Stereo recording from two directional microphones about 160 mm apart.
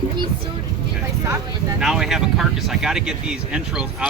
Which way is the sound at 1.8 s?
5° right (ahead or behind).